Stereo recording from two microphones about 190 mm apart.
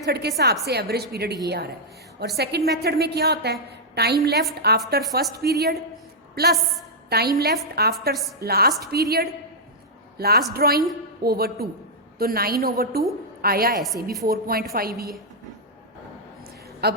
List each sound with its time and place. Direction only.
0.0 s a woman's voice: 60° right (ahead or behind)
13.8 s a woman's voice: centre (ahead or behind)
14.3 s a woman's voice: 50° right (ahead or behind)
16.8 s a woman's voice: 55° right (ahead or behind)